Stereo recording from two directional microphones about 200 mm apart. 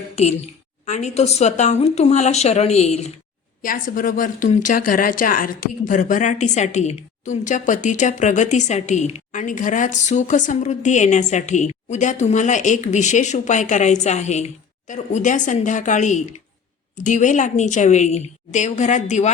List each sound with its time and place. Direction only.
0.2 s speech: 35° left (ahead or behind)
3.6 s speech: 45° left (ahead or behind)